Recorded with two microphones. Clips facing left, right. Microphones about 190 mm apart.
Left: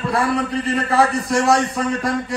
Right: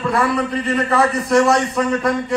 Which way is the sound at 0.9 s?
35° left (ahead or behind).